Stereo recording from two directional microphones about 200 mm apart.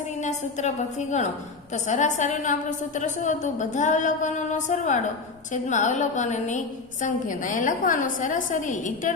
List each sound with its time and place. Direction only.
0.2 s a woman's voice: 35° left (ahead or behind)